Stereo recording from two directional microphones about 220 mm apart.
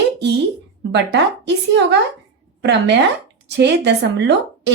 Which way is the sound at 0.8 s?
50° right (ahead or behind).